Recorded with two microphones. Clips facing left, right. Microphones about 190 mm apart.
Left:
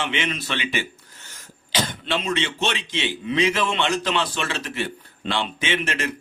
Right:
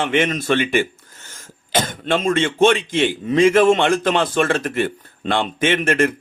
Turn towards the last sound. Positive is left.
turn(degrees=-50)  # may be behind; listen again after turning